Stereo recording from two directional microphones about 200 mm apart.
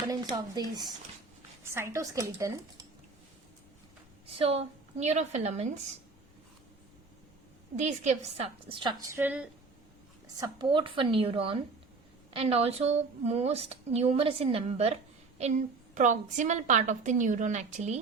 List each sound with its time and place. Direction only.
0.1 s a woman's voice: 20° right (ahead or behind)
4.4 s a woman's voice: 30° right (ahead or behind)
7.8 s a woman's voice: 35° right (ahead or behind); by 9.5 s 10° right (ahead or behind)
10.3 s a woman's voice: 20° right (ahead or behind); by 18.0 s 35° right (ahead or behind)